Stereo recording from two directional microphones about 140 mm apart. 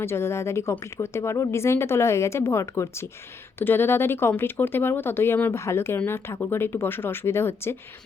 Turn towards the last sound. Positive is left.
turn(degrees=15)  # may be behind; listen again after turning